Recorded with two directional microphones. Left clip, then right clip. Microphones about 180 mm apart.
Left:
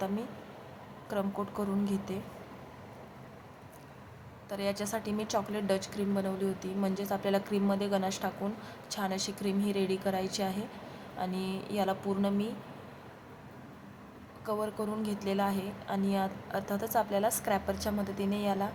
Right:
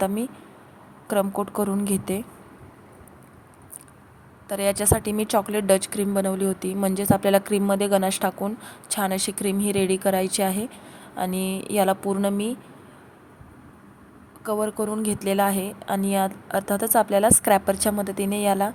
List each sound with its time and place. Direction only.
1.0 s a woman's voice: 35° right (ahead or behind)
4.4 s a woman's voice: 35° right (ahead or behind)
14.4 s a woman's voice: 30° right (ahead or behind)